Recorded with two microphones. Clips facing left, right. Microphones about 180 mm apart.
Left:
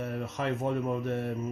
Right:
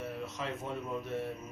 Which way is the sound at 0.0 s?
60° left (ahead or behind).